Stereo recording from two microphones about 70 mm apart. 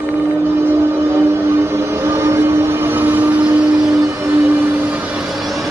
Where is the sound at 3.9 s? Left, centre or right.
Right; by 5.3 s centre.